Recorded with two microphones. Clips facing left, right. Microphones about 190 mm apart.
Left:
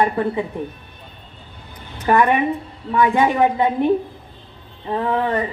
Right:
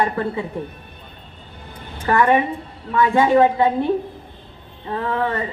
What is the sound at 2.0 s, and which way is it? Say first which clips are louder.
A woman's voice: left 1 dB; 15° left (ahead or behind).